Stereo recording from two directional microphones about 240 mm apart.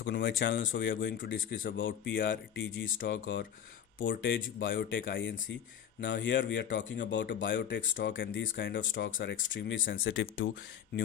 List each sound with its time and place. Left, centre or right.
0.0 s speech: left
1.2 s speech: left
7.8 s speech: left